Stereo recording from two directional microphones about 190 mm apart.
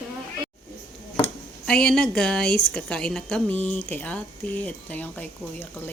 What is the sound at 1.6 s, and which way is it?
A woman's voice, 5° left (ahead or behind).